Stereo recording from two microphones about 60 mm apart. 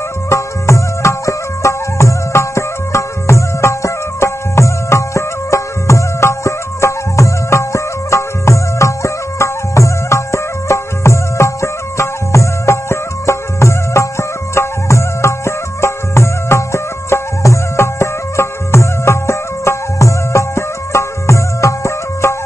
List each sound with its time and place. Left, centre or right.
0.3 s music: left